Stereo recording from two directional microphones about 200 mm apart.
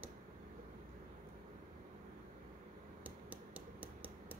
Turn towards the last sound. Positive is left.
turn(degrees=-10)  # may be behind; listen again after turning